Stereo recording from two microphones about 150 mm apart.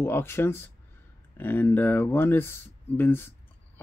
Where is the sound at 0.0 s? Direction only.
15° left (ahead or behind).